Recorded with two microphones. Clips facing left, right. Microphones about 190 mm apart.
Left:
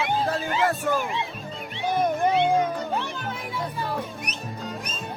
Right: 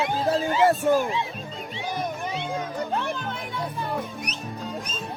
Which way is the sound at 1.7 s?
55° left (ahead or behind).